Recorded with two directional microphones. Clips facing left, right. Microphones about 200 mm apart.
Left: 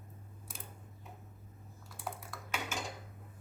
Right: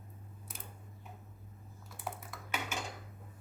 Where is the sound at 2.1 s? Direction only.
5° right (ahead or behind).